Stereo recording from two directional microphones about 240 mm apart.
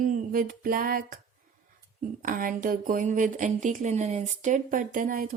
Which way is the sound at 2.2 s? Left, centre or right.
Right.